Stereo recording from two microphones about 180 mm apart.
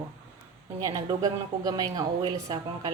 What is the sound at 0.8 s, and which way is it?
A woman's voice, 20° right (ahead or behind).